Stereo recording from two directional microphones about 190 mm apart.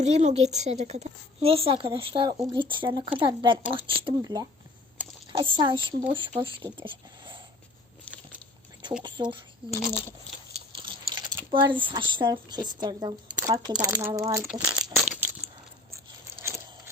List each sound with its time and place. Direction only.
0.0 s speech: 35° right (ahead or behind)
6.8 s a sound: 25° right (ahead or behind)
9.0 s speech: 25° right (ahead or behind)
9.8 s speech: 30° left (ahead or behind)
10.5 s biting: 25° right (ahead or behind)
11.5 s speech: 25° right (ahead or behind)
14.4 s speech: 5° right (ahead or behind)
16.4 s a sound: 15° right (ahead or behind)